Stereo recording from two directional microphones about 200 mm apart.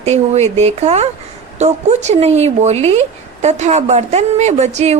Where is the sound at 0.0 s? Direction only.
35° right (ahead or behind).